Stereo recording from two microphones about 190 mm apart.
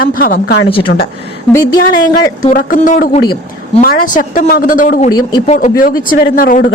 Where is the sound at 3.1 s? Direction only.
25° left (ahead or behind).